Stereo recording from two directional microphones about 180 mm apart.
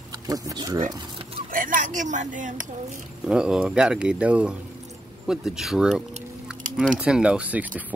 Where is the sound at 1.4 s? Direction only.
50° right (ahead or behind).